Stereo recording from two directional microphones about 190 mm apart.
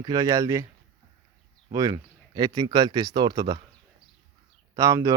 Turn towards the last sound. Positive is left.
turn(degrees=-15)  # may be behind; listen again after turning